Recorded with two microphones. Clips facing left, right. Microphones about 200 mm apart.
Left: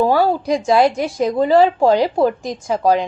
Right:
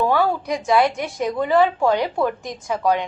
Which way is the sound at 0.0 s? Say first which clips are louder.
Left 4 dB; 35° left (ahead or behind).